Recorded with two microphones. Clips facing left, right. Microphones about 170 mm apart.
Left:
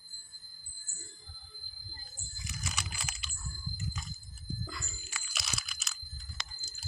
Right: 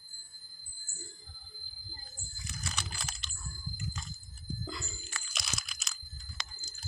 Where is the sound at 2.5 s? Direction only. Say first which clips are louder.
Even; 10° left (ahead or behind).